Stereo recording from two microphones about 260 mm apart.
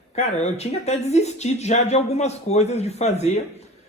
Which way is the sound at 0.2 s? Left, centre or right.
Left.